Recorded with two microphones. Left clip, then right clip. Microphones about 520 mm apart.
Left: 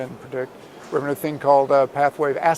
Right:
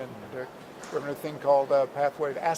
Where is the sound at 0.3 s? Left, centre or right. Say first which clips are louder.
Left 10 dB; left.